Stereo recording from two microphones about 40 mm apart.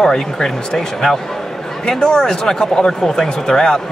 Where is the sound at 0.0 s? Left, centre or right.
Centre.